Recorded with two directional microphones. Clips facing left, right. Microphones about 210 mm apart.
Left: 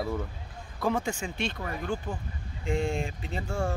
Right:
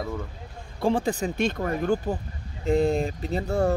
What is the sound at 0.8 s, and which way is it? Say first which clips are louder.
Speech: right 5 dB; 30° right (ahead or behind).